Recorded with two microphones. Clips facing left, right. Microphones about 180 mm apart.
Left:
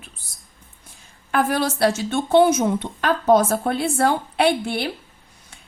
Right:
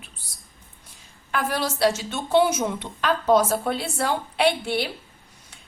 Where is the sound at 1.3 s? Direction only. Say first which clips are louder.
Left 5 dB; 50° left (ahead or behind).